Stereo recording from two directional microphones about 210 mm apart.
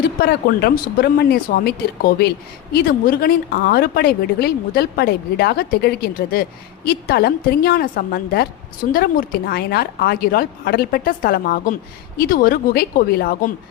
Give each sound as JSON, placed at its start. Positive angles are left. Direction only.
{"t": 0.0, "sound": "speech", "side_deg": 50}